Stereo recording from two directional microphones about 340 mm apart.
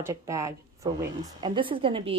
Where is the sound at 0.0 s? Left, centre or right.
Centre.